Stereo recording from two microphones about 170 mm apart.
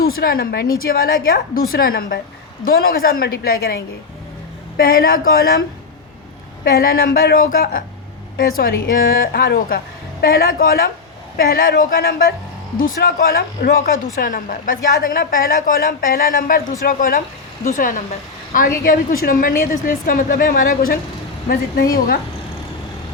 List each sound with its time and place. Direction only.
0.0 s a woman's voice: 60° left (ahead or behind)
6.7 s a woman's voice: 65° left (ahead or behind)